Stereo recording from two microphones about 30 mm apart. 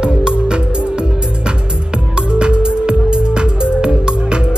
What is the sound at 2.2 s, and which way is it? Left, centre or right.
Music, right.